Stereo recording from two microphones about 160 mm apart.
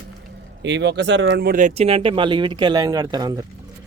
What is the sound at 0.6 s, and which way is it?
Speech, 90° right.